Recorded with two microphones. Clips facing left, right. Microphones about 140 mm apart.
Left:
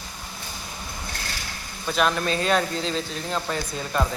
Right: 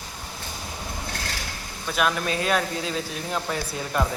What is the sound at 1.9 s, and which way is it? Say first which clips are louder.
Speech: left 2 dB; 5° right (ahead or behind).